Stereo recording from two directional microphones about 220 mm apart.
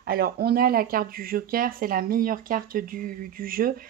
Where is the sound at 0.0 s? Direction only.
45° right (ahead or behind).